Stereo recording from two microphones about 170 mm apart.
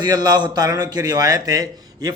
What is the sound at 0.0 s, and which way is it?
A man's voice, 25° right (ahead or behind).